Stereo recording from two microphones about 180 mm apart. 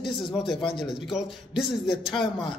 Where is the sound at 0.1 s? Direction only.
30° left (ahead or behind).